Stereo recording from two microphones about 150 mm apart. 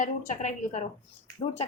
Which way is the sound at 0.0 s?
55° left (ahead or behind).